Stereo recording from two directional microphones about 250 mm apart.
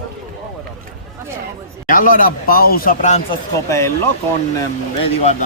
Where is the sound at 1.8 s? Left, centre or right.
Left.